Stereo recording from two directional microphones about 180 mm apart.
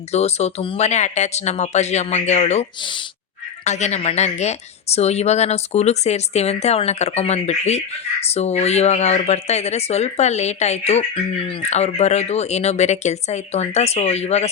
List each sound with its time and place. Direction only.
0.1 s speech: 35° left (ahead or behind)